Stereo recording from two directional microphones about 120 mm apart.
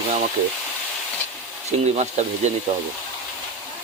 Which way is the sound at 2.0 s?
75° right (ahead or behind).